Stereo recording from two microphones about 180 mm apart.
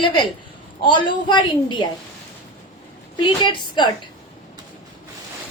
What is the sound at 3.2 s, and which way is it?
Speech, 25° left (ahead or behind).